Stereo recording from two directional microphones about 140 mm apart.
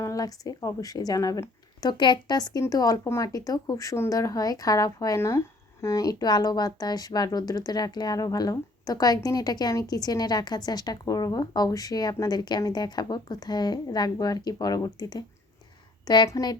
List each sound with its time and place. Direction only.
0.0 s speech: 25° left (ahead or behind)